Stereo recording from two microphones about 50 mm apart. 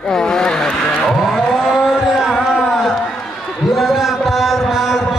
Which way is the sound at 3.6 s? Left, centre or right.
Centre.